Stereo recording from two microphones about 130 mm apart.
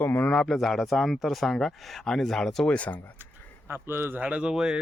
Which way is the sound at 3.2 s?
20° right (ahead or behind).